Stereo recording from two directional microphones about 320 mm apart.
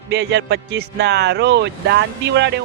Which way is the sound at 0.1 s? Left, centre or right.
Right.